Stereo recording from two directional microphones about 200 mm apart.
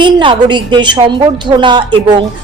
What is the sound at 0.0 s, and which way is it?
A woman's voice, 25° right (ahead or behind).